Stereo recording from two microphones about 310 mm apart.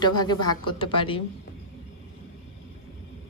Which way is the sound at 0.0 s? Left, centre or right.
Centre.